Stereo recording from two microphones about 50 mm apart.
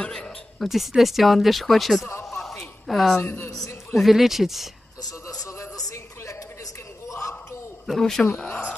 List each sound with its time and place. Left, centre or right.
0.0 s speech: centre
0.6 s speech: centre
2.4 s a sound: centre
3.5 s speech: centre
7.8 s speech: centre